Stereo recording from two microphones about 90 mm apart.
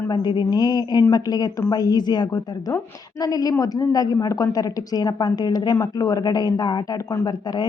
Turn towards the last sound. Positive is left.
turn(degrees=50)  # may be behind; listen again after turning